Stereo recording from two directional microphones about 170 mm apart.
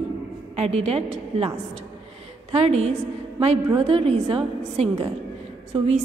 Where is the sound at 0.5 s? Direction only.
40° right (ahead or behind).